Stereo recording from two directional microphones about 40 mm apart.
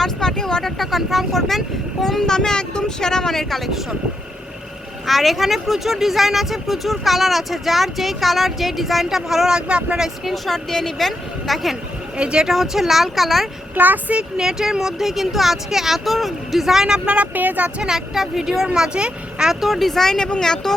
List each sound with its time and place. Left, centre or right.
0.0 s speech: centre
5.0 s speech: centre
9.5 s speech: right
10.3 s speech: centre
12.1 s speech: right
12.5 s speech: centre
13.7 s speech: right
14.3 s speech: centre
17.3 s speech: right
17.8 s speech: centre
18.7 s speech: right
19.5 s speech: centre